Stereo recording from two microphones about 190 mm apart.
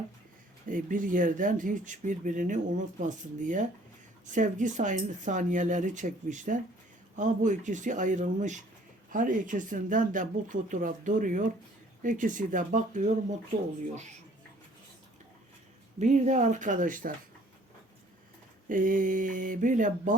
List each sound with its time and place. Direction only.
0.7 s speech: 45° right (ahead or behind)
16.0 s speech: 40° right (ahead or behind)
18.7 s speech: 45° right (ahead or behind)